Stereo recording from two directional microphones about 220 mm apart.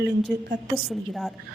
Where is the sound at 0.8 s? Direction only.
Centre (ahead or behind).